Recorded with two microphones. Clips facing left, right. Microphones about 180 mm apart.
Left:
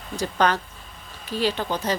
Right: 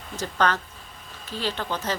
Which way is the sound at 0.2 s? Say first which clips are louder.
Left 2 dB; 10° left (ahead or behind).